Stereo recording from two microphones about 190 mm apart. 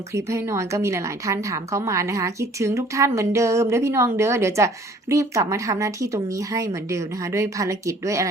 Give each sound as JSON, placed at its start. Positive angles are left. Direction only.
{"t": 0.1, "sound": "a woman's voice", "side_deg": -15}